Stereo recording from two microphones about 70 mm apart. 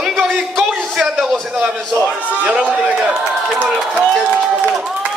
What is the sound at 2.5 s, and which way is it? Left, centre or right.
Speech, centre.